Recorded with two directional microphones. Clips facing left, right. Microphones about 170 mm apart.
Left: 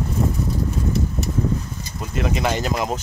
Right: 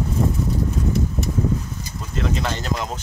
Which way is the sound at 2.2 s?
15° left (ahead or behind).